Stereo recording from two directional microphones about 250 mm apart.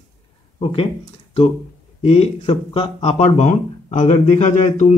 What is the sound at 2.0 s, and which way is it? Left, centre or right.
Speech, left.